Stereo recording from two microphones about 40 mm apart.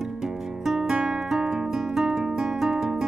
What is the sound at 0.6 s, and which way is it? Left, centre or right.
Music, centre.